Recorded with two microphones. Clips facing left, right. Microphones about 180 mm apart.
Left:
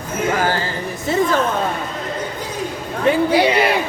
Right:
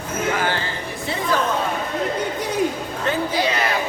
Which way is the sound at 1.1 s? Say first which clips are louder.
Left 10 dB; 45° left (ahead or behind).